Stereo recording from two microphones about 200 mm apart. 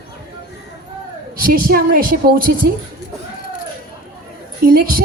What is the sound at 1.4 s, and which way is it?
A man's voice, 45° right (ahead or behind).